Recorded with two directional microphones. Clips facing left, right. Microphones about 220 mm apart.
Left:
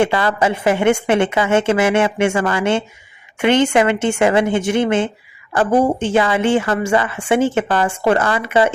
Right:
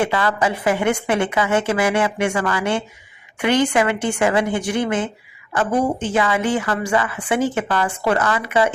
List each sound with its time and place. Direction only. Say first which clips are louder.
0.0 s a woman's voice: left 3 dB; 30° left (ahead or behind)